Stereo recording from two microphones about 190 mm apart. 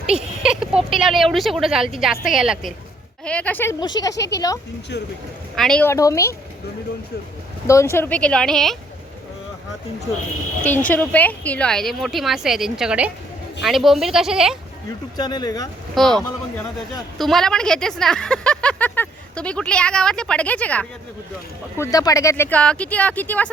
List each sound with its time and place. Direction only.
0.1 s a sound: 5° right (ahead or behind)
0.9 s speech: centre (ahead or behind)
3.8 s speech: 20° left (ahead or behind)
5.5 s speech: 5° left (ahead or behind)
7.7 s speech: 15° left (ahead or behind)
10.6 s speech: 10° left (ahead or behind)
15.2 s speech: 20° left (ahead or behind)
16.0 s speech: centre (ahead or behind)
21.8 s speech: 20° left (ahead or behind)